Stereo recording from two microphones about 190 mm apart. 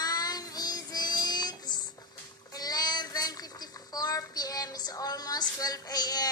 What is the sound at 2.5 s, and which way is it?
A child's voice, 20° left (ahead or behind).